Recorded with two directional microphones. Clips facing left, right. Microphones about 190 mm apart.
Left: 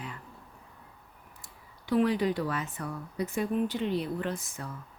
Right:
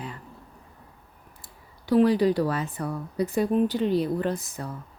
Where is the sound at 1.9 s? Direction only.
35° right (ahead or behind).